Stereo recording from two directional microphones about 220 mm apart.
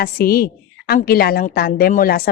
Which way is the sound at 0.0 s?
45° left (ahead or behind).